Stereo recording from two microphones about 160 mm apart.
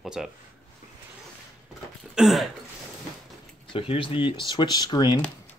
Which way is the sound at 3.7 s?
35° left (ahead or behind).